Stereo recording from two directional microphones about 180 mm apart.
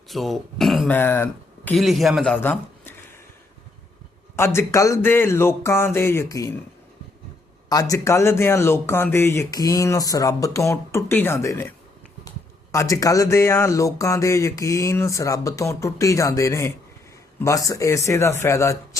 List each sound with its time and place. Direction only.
0.1 s speech: centre (ahead or behind)
0.9 s speech: 10° left (ahead or behind)
1.7 s speech: centre (ahead or behind)
4.4 s speech: 15° left (ahead or behind)
7.7 s speech: 20° left (ahead or behind)
12.7 s speech: 15° left (ahead or behind)